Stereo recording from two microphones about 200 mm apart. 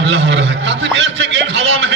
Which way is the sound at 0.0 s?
65° right (ahead or behind).